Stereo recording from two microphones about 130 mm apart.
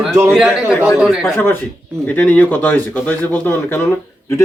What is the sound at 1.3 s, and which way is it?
Speech, 15° left (ahead or behind).